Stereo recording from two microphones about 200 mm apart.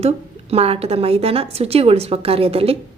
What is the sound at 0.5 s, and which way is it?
A woman's voice, 30° right (ahead or behind).